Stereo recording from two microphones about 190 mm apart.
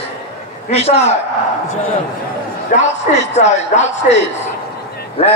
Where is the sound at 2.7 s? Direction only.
35° left (ahead or behind).